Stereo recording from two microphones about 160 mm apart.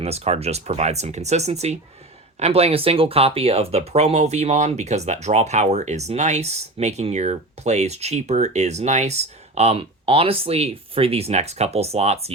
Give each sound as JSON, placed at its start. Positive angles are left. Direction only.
{"t": 0.0, "sound": "speech", "side_deg": -40}